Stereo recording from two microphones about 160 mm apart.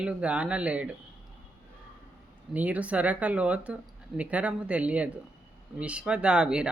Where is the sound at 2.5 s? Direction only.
10° right (ahead or behind).